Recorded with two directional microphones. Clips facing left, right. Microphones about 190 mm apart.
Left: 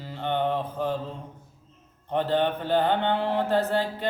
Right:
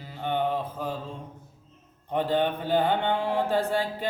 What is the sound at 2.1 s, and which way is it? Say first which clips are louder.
Mantra: left 1 dB; 10° right (ahead or behind).